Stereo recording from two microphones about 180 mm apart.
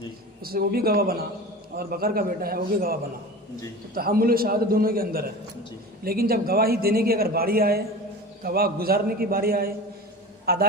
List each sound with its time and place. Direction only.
0.4 s a man's voice: 55° right (ahead or behind)